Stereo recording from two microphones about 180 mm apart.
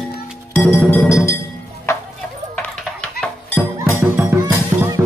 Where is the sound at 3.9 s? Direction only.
10° right (ahead or behind).